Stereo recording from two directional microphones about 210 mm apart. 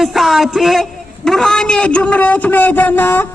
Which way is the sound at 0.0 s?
Centre (ahead or behind).